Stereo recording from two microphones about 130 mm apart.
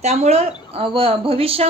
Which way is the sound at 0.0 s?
55° right (ahead or behind).